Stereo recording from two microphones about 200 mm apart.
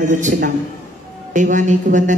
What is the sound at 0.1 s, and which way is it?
A man's voice, 40° right (ahead or behind).